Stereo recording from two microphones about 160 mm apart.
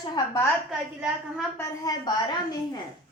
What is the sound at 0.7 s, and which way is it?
Speech, centre (ahead or behind).